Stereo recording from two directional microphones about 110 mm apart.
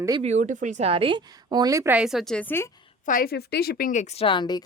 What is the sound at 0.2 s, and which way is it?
A woman's voice, 90° right.